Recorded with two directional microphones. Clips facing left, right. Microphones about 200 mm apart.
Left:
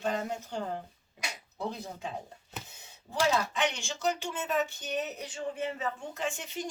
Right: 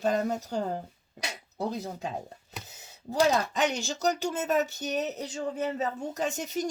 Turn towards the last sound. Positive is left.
turn(degrees=-40)  # may be behind; listen again after turning